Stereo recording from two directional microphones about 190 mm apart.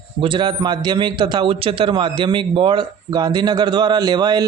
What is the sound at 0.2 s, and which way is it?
A man's voice, 25° right (ahead or behind).